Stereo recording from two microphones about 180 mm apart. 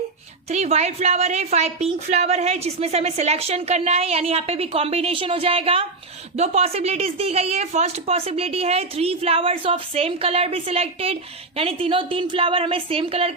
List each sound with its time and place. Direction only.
0.5 s a woman's voice: 40° right (ahead or behind)